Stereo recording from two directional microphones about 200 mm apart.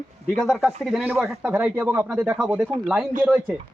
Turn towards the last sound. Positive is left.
turn(degrees=-5)  # may be behind; listen again after turning